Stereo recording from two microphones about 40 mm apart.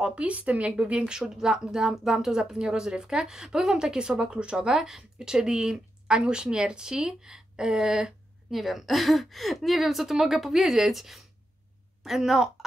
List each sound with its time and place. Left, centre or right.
0.0 s a woman's voice: right
1.0 s a woman's voice: centre
8.5 s a woman's voice: centre